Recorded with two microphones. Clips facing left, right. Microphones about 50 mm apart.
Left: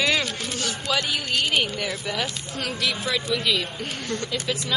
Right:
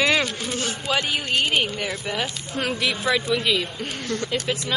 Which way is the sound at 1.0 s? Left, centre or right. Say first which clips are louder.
Right 3 dB; right.